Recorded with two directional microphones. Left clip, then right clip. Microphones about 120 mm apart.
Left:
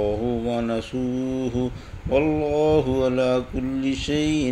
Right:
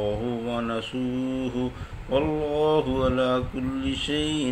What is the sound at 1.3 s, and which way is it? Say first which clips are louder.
Speech: left 3 dB; 35° left (ahead or behind).